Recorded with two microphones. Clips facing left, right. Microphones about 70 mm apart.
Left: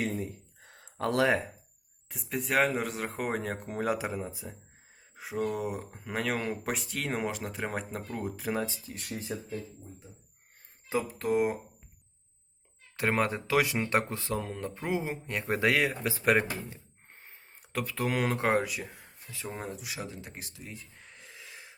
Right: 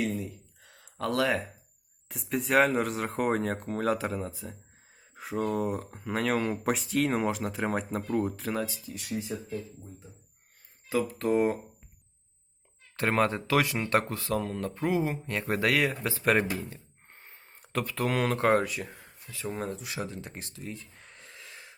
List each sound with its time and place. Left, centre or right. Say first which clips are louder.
0.0 s a sound: right 1 dB; left
2.0 s speech: right 3 dB; centre
8.4 s speech: even; left
8.9 s speech: right 4 dB; left
11.2 s speech: right 2 dB; centre
13.0 s speech: right 2 dB; centre
16.6 s a sound: right 1 dB; centre
18.3 s speech: right 3 dB; centre
19.3 s speech: right 4 dB; centre